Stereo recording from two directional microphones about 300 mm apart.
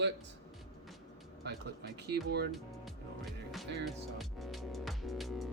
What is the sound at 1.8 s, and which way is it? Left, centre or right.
Speech, right.